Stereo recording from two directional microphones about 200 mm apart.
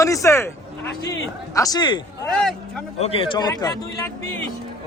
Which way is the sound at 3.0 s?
25° left (ahead or behind).